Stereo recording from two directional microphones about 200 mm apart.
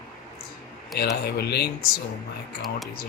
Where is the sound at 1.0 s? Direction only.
55° left (ahead or behind).